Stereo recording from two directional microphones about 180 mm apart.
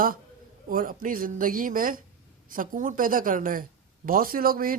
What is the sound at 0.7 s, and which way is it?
Speech, 50° right (ahead or behind).